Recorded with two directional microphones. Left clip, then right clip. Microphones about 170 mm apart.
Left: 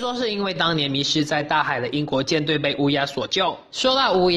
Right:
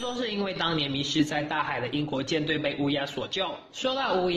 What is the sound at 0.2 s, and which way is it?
A woman's voice, 35° left (ahead or behind).